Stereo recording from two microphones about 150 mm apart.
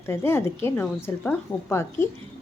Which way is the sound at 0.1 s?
15° left (ahead or behind).